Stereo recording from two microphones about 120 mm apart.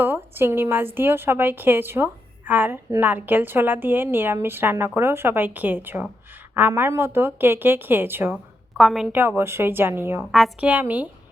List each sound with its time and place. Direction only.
0.0 s a woman's voice: 20° right (ahead or behind)
8.8 s a woman's voice: centre (ahead or behind)
9.1 s a woman's voice: 20° right (ahead or behind)